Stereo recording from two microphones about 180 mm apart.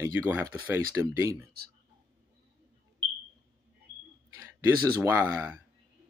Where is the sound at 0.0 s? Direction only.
10° right (ahead or behind).